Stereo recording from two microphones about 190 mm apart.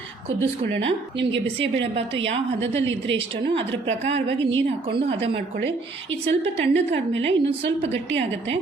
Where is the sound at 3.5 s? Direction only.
70° right (ahead or behind).